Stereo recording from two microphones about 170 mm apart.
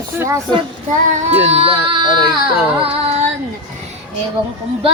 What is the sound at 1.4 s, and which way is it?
Speech, 35° right (ahead or behind).